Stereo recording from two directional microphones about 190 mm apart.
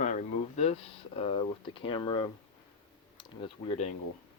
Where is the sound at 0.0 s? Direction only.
40° left (ahead or behind).